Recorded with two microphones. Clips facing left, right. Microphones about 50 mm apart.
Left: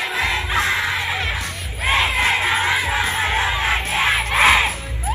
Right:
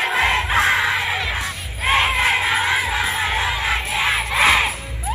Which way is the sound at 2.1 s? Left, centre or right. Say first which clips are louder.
Even; centre.